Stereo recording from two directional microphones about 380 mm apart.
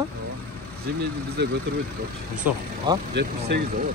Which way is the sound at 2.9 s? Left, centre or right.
Centre.